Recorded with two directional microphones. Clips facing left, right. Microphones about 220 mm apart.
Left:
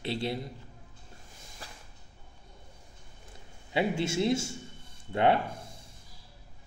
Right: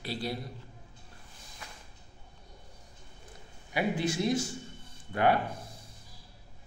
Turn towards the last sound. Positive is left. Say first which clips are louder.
# left 1 dB
turn(degrees=25)  # may be behind; listen again after turning